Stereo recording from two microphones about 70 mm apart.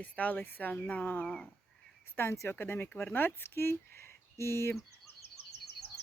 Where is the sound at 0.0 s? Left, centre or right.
Left.